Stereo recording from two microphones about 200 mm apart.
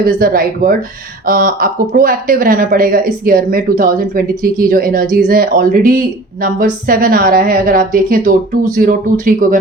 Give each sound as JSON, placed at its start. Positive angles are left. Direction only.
{"t": 0.0, "sound": "speech", "side_deg": -45}